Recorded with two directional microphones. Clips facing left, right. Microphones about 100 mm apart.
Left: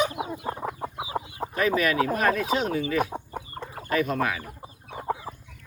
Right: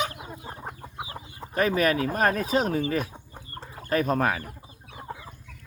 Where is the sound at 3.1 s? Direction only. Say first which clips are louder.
Left 8 dB; 60° left (ahead or behind).